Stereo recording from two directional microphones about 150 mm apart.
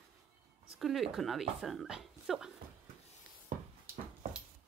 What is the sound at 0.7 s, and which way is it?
Speech, centre (ahead or behind).